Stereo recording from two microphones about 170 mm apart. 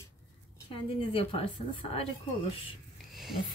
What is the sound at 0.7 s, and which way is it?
A woman's voice, 35° left (ahead or behind).